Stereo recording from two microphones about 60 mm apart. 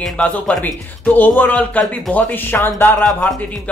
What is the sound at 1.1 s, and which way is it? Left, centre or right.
Speech, left.